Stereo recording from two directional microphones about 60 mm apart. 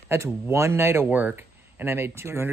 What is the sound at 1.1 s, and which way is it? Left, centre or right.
Speech, right.